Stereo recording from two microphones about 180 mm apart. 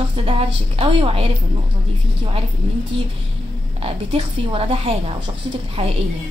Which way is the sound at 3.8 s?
30° right (ahead or behind).